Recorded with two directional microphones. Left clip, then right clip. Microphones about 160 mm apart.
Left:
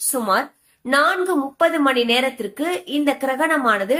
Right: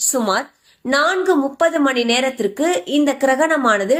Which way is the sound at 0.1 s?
35° right (ahead or behind).